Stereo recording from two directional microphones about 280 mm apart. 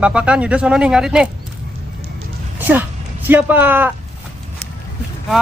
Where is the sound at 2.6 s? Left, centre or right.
Centre.